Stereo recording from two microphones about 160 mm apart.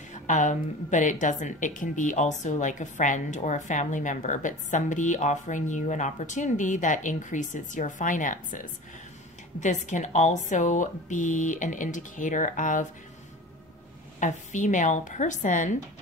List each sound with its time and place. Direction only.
0.1 s a woman's voice: 50° left (ahead or behind)
14.2 s a woman's voice: 50° left (ahead or behind)